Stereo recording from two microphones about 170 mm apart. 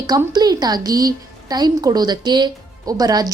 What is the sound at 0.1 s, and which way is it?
A woman's voice, 25° right (ahead or behind).